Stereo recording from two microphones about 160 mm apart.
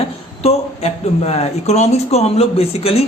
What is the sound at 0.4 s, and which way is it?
A man's voice, 40° left (ahead or behind).